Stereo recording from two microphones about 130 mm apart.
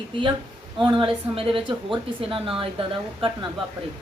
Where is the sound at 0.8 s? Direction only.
40° right (ahead or behind).